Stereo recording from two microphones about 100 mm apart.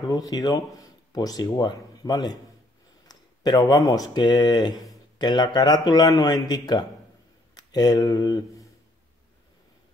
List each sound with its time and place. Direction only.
0.1 s speech: 40° left (ahead or behind)
3.1 s a sound: 40° left (ahead or behind)
4.1 s speech: 45° left (ahead or behind)